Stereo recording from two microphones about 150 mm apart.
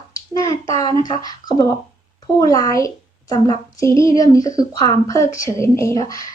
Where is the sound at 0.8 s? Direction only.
40° right (ahead or behind).